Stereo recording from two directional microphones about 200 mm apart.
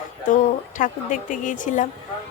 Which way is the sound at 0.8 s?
40° left (ahead or behind).